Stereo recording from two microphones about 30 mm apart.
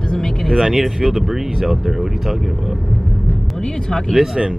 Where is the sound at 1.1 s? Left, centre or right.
Centre.